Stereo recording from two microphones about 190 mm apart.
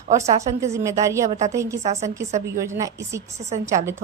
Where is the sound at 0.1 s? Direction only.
35° right (ahead or behind).